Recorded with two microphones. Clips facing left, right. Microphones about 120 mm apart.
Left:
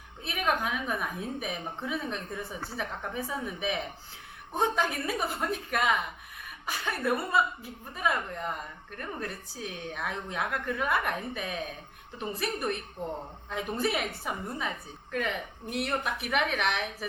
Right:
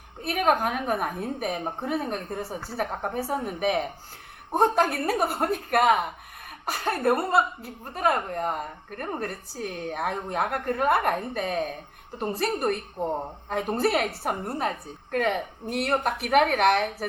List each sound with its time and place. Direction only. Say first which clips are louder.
0.2 s speech: right 6 dB; 50° right (ahead or behind)